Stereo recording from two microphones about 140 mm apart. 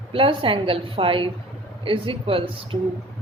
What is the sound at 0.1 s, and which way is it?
A woman's voice, 40° right (ahead or behind).